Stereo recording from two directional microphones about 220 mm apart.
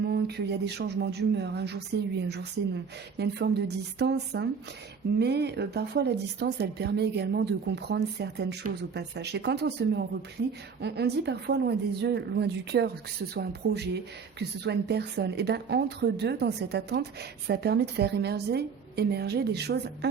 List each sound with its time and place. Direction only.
0.1 s speech: 50° right (ahead or behind)
3.2 s speech: 50° right (ahead or behind)